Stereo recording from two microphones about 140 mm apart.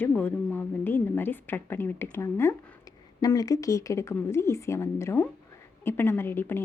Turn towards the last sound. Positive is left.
turn(degrees=15)  # may be behind; listen again after turning